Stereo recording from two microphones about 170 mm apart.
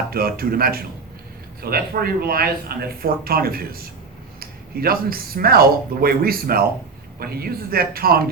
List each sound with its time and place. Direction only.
0.1 s speech: 60° right (ahead or behind)